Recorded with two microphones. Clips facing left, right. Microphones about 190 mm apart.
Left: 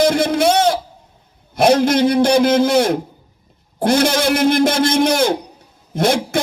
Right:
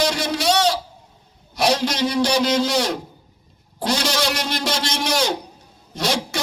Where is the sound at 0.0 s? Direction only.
55° left (ahead or behind).